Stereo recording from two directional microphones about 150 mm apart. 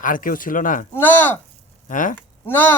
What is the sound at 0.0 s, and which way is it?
Speech, 65° left (ahead or behind).